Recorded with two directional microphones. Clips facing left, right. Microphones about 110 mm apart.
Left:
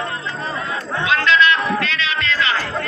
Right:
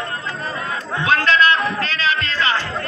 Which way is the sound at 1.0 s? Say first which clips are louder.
Even; 40° right (ahead or behind).